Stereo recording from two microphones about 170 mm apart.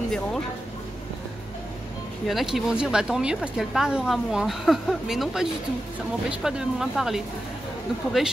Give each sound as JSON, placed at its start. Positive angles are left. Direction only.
{"t": 2.2, "sound": "speech", "side_deg": 0}